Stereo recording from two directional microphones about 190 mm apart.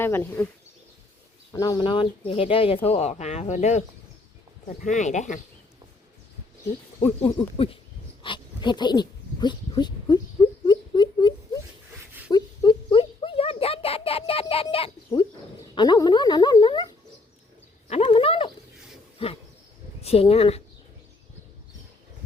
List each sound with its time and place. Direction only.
0.0 s speech: 10° left (ahead or behind)
1.5 s speech: 20° left (ahead or behind); by 5.4 s 40° left (ahead or behind)
7.0 s speech: 25° left (ahead or behind)
10.7 s a sound: 25° left (ahead or behind)
15.7 s speech: 20° left (ahead or behind)
17.8 s a sound: 30° left (ahead or behind)
20.0 s speech: 30° left (ahead or behind)